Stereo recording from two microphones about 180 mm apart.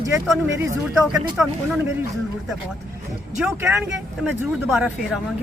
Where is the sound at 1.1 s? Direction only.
5° right (ahead or behind).